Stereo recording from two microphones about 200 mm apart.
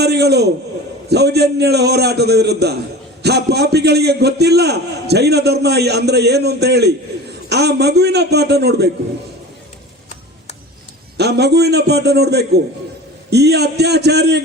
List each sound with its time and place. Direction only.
0.0 s a man's voice: 55° right (ahead or behind)
11.2 s a man's voice: 55° right (ahead or behind)